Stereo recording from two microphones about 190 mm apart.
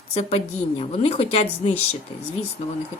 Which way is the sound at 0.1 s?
35° left (ahead or behind).